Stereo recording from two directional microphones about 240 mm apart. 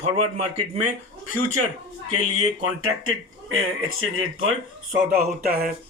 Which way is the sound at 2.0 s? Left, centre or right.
Right.